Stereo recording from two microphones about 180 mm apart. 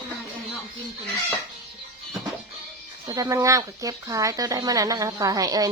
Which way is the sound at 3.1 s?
20° right (ahead or behind).